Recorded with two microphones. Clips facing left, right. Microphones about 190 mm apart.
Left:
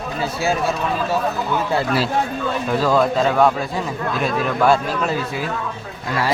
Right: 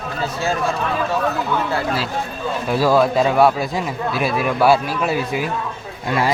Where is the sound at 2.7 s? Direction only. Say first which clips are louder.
Right 2 dB; 10° right (ahead or behind).